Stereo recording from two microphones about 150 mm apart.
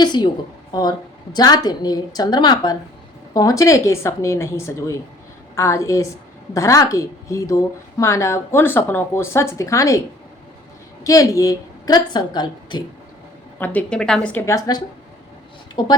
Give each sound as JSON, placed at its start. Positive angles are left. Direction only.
{"t": 0.0, "sound": "a woman's voice", "side_deg": 30}
{"t": 11.0, "sound": "a woman's voice", "side_deg": 20}
{"t": 13.6, "sound": "a woman's voice", "side_deg": 10}
{"t": 14.4, "sound": "a woman's voice", "side_deg": 20}
{"t": 15.8, "sound": "speech", "side_deg": 30}